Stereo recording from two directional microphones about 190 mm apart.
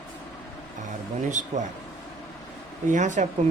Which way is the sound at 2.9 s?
40° right (ahead or behind).